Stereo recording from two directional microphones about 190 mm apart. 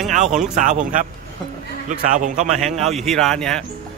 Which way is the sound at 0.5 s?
40° right (ahead or behind).